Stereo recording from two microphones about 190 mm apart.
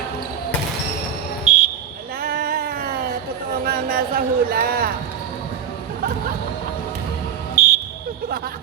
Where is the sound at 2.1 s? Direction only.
50° right (ahead or behind).